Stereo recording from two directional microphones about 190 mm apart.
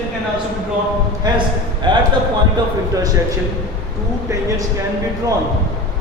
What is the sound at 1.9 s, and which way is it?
Speech, 25° right (ahead or behind).